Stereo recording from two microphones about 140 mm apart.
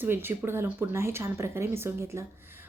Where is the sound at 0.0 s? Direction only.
15° right (ahead or behind).